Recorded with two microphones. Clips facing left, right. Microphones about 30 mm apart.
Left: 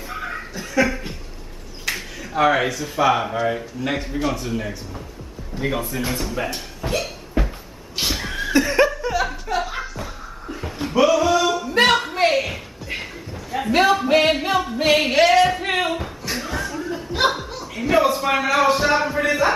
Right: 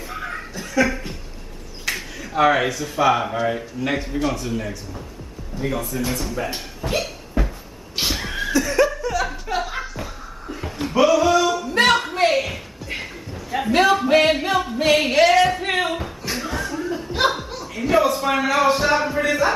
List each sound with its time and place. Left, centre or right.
0.1 s a sound: centre
1.9 s speech: centre
5.6 s speech: left
6.8 s hiccup: centre
7.4 s a sound: left
7.9 s neigh: centre
8.5 s laughter: left
9.0 s chuckle: centre
9.3 s chuckle: centre
10.5 s a sound: centre
13.7 s singing: centre
19.2 s speech: centre